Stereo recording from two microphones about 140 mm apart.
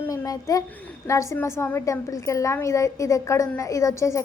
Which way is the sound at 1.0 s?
20° left (ahead or behind).